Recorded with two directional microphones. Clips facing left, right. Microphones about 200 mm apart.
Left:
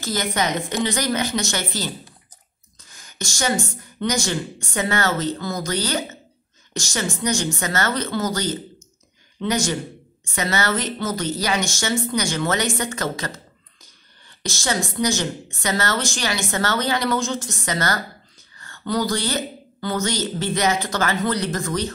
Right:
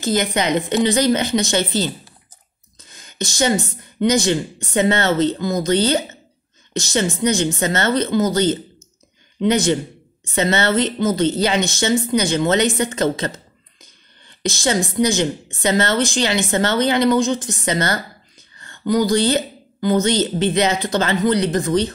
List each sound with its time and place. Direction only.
0.0 s a woman's voice: 20° right (ahead or behind)
13.8 s a sound: 20° right (ahead or behind)
15.6 s a woman's voice: 20° right (ahead or behind)